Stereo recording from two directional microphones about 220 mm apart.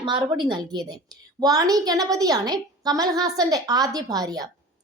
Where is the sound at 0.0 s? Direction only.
20° right (ahead or behind).